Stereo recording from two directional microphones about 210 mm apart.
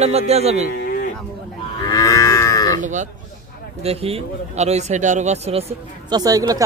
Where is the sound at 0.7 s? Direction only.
45° left (ahead or behind).